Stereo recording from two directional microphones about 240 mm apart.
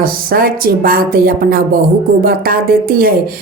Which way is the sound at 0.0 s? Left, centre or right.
Right.